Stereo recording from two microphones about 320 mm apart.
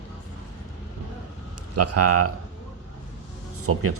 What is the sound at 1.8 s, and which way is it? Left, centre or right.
Speech, right.